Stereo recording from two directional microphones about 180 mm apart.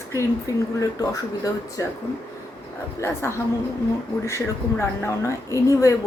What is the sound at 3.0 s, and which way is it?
Speech, 15° left (ahead or behind).